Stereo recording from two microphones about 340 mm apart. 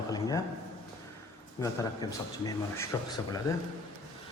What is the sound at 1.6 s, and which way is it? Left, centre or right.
Speech, centre.